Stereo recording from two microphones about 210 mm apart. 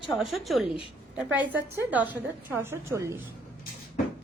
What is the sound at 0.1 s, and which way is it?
A woman's voice, centre (ahead or behind).